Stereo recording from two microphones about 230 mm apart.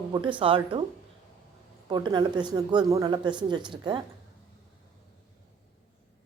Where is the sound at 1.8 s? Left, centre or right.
Centre.